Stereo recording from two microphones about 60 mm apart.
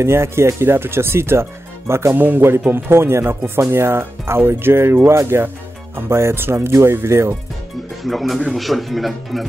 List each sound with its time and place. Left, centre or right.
0.0 s speech: right
2.1 s speech: right
8.0 s speech: centre